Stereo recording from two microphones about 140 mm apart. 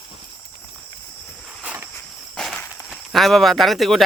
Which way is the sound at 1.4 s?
10° right (ahead or behind).